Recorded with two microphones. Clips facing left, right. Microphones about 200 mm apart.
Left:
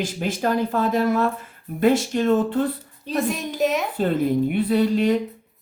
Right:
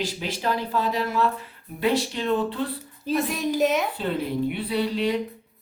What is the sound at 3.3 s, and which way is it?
Speech, centre (ahead or behind).